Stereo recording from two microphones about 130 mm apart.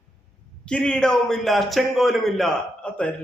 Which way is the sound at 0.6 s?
5° left (ahead or behind).